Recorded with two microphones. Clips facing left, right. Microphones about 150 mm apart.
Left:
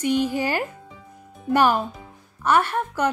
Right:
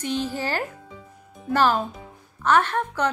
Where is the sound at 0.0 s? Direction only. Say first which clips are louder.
Left 5 dB; 10° left (ahead or behind).